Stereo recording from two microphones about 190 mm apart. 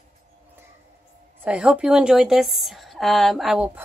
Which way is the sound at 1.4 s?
5° right (ahead or behind).